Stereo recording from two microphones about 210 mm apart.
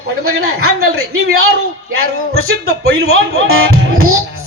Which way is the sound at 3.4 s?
75° right (ahead or behind).